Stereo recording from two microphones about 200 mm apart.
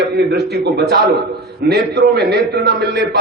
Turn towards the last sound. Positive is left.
turn(degrees=-55)  # may be behind; listen again after turning